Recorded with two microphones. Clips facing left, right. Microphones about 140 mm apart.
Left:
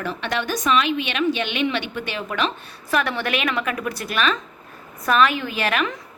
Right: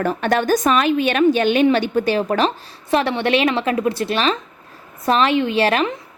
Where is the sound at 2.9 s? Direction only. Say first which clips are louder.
Right 6 dB; 25° right (ahead or behind).